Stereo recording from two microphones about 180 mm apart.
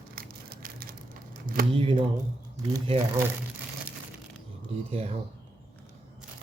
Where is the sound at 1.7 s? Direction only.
30° right (ahead or behind).